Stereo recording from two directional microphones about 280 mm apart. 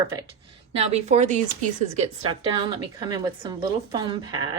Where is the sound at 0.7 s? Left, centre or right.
Right.